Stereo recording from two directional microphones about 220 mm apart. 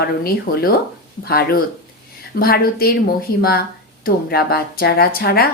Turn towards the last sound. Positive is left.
turn(degrees=45)  # may be behind; listen again after turning